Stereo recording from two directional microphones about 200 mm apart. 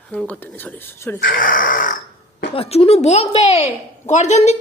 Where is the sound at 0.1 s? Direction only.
5° left (ahead or behind).